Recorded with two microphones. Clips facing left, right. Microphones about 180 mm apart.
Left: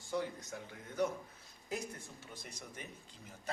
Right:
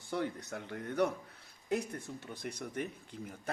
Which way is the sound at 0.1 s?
65° right (ahead or behind).